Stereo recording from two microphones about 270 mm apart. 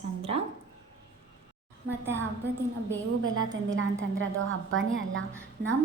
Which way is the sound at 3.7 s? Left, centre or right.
Right.